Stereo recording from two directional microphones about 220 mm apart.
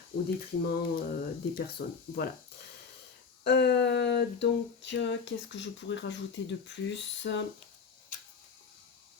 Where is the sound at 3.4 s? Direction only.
50° left (ahead or behind).